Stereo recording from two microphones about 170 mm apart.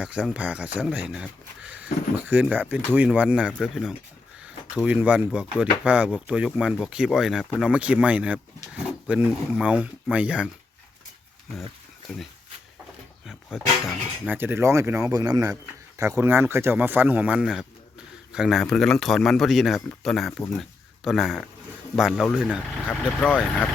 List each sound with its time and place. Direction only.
0.0 s speech: 5° right (ahead or behind)
13.2 s speech: centre (ahead or behind)
22.9 s speech: 5° left (ahead or behind)